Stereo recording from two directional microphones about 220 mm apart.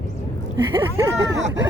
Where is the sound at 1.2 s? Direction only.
55° right (ahead or behind).